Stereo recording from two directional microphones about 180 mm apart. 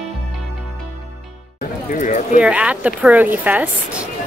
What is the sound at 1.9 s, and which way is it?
Speech, 45° left (ahead or behind).